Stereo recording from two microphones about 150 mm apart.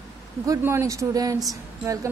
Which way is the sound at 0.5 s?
20° right (ahead or behind).